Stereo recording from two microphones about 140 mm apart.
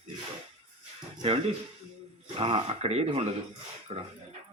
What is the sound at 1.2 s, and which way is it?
Speech, 45° right (ahead or behind).